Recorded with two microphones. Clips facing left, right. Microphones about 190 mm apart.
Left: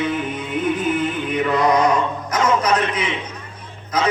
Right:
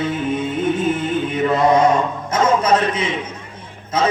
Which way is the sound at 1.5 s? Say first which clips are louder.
Right 3 dB; 25° right (ahead or behind).